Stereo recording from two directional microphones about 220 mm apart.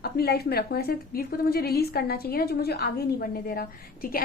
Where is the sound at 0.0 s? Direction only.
45° left (ahead or behind).